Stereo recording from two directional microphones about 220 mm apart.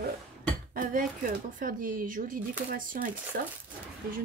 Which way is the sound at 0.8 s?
40° right (ahead or behind).